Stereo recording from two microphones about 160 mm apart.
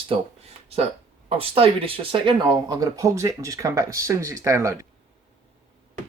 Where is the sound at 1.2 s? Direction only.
35° right (ahead or behind); by 4.7 s 20° right (ahead or behind).